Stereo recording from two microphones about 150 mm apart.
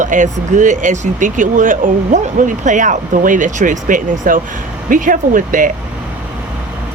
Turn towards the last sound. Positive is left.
turn(degrees=-65)  # may be behind; listen again after turning